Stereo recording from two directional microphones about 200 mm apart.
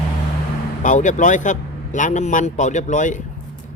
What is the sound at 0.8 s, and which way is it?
Speech, 40° left (ahead or behind).